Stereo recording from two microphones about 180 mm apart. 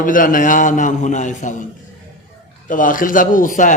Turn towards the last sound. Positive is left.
turn(degrees=45)  # may be behind; listen again after turning